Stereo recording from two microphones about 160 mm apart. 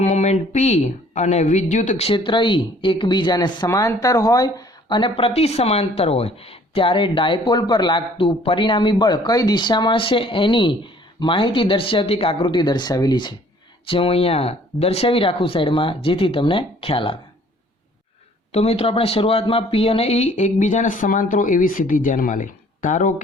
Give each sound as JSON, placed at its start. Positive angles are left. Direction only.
{"t": 0.0, "sound": "speech", "side_deg": 45}
{"t": 18.5, "sound": "speech", "side_deg": 40}